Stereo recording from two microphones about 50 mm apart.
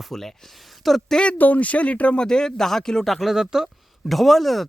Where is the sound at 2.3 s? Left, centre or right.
Centre.